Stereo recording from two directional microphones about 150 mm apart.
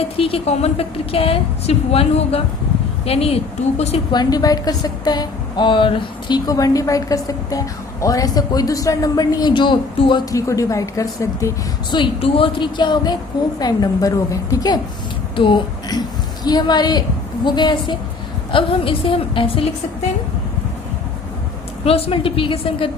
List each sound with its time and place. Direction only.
0.2 s a woman's voice: 40° left (ahead or behind)
4.1 s a woman's voice: 25° left (ahead or behind)
10.3 s a woman's voice: 20° left (ahead or behind)
11.9 s a woman's voice: 35° left (ahead or behind)
21.8 s a woman's voice: 40° left (ahead or behind)